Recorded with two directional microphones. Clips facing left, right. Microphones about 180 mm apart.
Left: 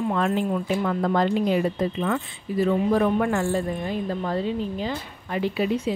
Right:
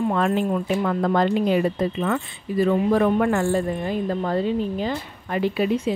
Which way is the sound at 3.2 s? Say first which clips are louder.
Right 3 dB; 50° right (ahead or behind).